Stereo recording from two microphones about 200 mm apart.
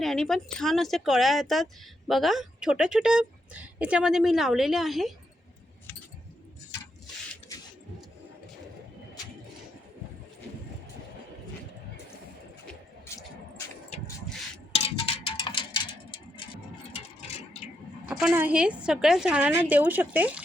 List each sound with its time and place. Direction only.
0.0 s speech: centre (ahead or behind)
13.1 s vehicle: 15° left (ahead or behind)
14.7 s a sound: 30° left (ahead or behind)
18.1 s speech: 5° right (ahead or behind)